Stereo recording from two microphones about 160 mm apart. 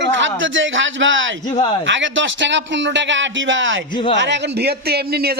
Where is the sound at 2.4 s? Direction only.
90° right.